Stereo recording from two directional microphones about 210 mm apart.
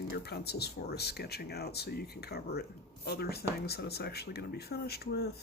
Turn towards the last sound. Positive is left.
turn(degrees=50)  # may be behind; listen again after turning